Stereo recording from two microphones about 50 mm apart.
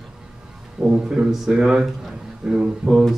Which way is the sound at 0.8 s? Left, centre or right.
Centre.